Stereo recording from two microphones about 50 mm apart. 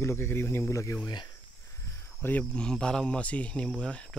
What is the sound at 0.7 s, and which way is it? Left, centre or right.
Speech, left.